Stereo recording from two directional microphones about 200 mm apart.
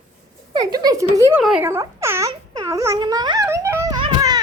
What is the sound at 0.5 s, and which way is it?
Speech, 20° right (ahead or behind).